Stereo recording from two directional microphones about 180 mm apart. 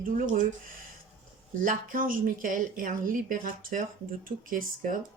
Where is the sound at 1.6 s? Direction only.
50° right (ahead or behind).